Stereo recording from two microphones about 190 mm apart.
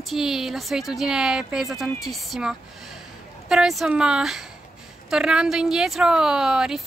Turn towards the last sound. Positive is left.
turn(degrees=-5)  # may be behind; listen again after turning